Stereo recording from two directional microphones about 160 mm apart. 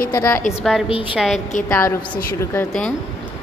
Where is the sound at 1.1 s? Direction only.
5° right (ahead or behind).